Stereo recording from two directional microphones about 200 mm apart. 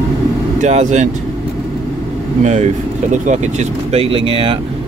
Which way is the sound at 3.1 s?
35° right (ahead or behind).